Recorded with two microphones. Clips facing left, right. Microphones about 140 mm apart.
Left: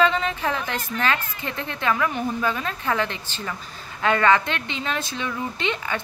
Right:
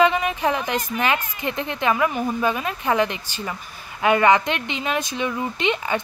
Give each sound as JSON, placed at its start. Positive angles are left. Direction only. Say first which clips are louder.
{"t": 0.0, "sound": "a woman's voice", "louder": "right 3 dB", "side_deg": -15}